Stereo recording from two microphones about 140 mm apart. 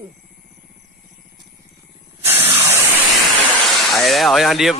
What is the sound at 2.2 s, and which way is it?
Spray, 15° right (ahead or behind).